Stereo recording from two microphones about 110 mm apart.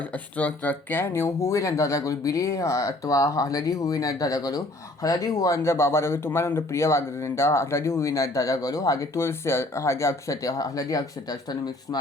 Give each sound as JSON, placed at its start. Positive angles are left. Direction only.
{"t": 0.1, "sound": "speech", "side_deg": 15}